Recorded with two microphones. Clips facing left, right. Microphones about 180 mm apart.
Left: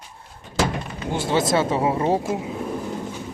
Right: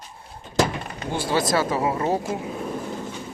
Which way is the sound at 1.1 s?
20° left (ahead or behind).